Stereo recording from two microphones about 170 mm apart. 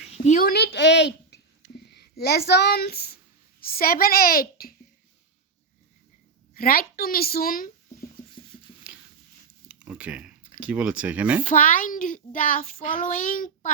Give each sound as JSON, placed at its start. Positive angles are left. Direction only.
{"t": 0.1, "sound": "a woman's voice", "side_deg": 50}
{"t": 6.5, "sound": "a woman's voice", "side_deg": 60}
{"t": 8.9, "sound": "a sound", "side_deg": -5}
{"t": 10.6, "sound": "speech", "side_deg": -5}
{"t": 11.4, "sound": "a child's voice", "side_deg": 50}